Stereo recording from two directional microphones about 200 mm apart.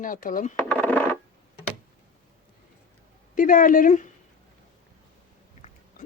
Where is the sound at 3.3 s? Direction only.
40° left (ahead or behind).